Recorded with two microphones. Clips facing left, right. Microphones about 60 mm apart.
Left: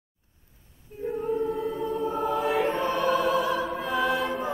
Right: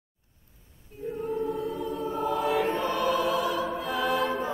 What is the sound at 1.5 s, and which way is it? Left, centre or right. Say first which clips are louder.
Choir: left 2 dB; left.